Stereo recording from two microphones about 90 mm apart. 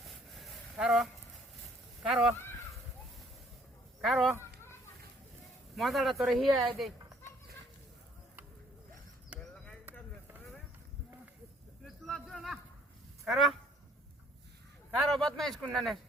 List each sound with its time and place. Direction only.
0.8 s speech: 5° right (ahead or behind)
2.0 s speech: 10° right (ahead or behind)
4.0 s a sound: centre (ahead or behind)
4.4 s children playing: 30° left (ahead or behind)
5.7 s speech: centre (ahead or behind)
9.3 s a sound: 15° right (ahead or behind)
11.8 s a sound: 5° left (ahead or behind)
13.2 s honk: centre (ahead or behind)
14.8 s speech: 5° left (ahead or behind)